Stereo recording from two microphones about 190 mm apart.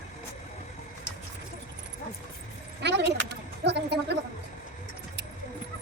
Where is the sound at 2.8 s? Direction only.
65° right (ahead or behind).